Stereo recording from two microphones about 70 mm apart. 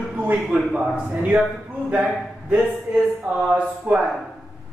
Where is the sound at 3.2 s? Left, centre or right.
Centre.